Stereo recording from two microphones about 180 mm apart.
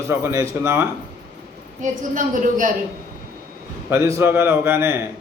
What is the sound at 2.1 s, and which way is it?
Child singing, 45° right (ahead or behind).